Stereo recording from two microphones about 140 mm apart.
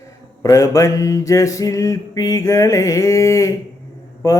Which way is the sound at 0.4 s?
25° left (ahead or behind).